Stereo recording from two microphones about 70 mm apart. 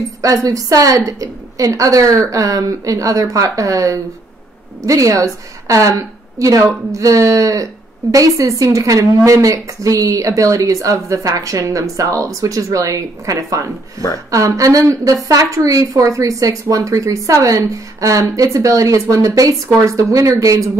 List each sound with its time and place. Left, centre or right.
0.2 s a woman's voice: right